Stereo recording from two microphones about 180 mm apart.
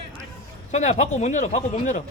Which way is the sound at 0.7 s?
40° left (ahead or behind).